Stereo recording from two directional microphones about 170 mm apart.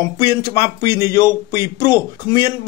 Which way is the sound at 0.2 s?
25° left (ahead or behind).